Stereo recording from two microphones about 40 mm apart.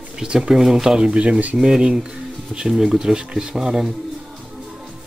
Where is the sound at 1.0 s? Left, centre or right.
Right; by 3.8 s centre.